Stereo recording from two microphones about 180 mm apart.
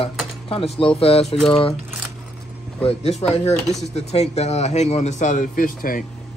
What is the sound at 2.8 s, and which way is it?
A man's voice, 35° left (ahead or behind).